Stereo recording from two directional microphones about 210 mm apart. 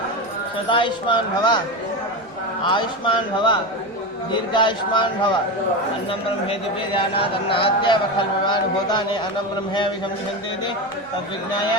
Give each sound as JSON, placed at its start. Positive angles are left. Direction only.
{"t": 0.7, "sound": "a man's voice", "side_deg": 25}
{"t": 2.6, "sound": "a man's voice", "side_deg": 25}